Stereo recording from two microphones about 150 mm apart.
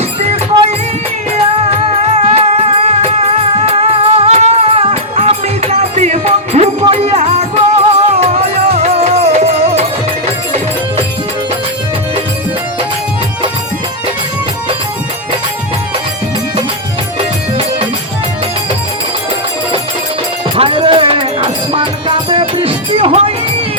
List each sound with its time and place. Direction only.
1.7 s music: 45° right (ahead or behind)
20.6 s music: 35° right (ahead or behind)